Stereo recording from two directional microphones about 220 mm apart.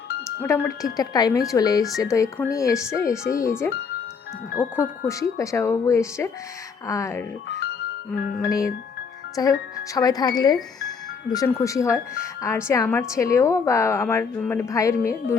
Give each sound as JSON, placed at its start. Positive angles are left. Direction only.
{"t": 0.4, "sound": "a woman's voice", "side_deg": 15}
{"t": 3.2, "sound": "speech", "side_deg": 40}
{"t": 4.6, "sound": "a woman's voice", "side_deg": 10}
{"t": 8.4, "sound": "a woman's voice", "side_deg": 15}